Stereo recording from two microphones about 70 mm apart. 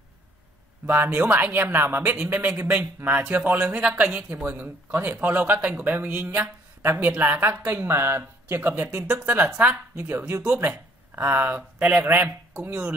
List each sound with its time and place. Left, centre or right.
0.8 s speech: right
4.5 s speech: right
6.8 s speech: right
8.9 s speech: centre
9.2 s speech: right